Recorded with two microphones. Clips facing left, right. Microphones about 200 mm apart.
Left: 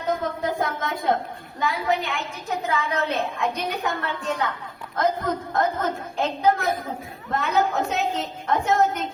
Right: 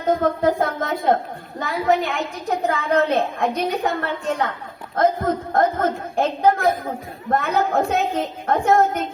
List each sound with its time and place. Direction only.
0.2 s a woman's voice: 50° right (ahead or behind)
2.5 s a woman's voice: 55° right (ahead or behind)